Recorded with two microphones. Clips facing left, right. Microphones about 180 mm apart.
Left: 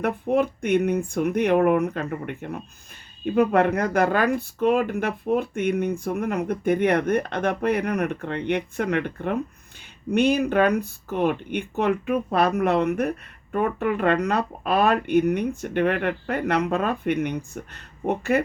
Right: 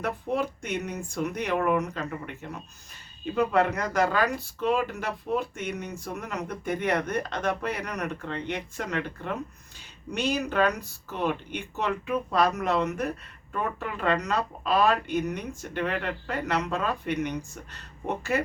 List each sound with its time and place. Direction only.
0.0 s speech: 55° left (ahead or behind)